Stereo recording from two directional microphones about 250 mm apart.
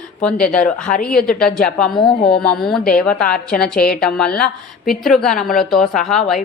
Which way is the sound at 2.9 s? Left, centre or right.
Centre.